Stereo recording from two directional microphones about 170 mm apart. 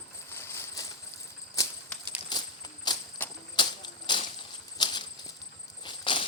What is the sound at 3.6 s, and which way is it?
Cricket, 25° left (ahead or behind).